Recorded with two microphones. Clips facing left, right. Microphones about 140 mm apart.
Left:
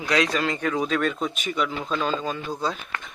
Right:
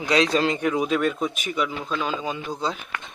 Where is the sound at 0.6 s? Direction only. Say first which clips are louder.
Right 2 dB; 15° right (ahead or behind).